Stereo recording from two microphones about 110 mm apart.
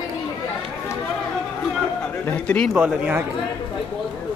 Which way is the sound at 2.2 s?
10° left (ahead or behind).